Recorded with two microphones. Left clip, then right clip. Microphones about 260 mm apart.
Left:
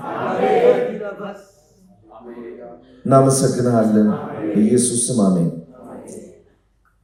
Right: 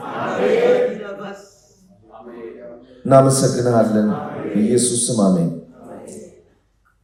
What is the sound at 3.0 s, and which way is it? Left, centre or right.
Speech, right.